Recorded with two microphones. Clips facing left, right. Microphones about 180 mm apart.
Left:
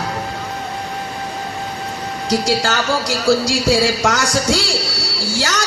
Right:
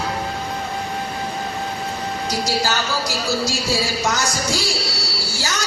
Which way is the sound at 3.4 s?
85° left.